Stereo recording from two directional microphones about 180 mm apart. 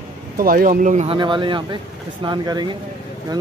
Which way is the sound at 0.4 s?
55° right (ahead or behind).